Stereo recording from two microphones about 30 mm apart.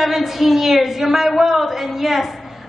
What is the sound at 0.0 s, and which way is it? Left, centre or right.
A woman's voice, centre.